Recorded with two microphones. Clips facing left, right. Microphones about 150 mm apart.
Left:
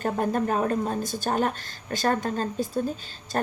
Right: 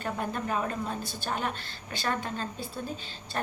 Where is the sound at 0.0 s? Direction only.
45° left (ahead or behind).